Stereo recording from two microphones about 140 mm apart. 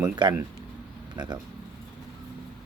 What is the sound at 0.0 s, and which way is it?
Speech, 30° right (ahead or behind).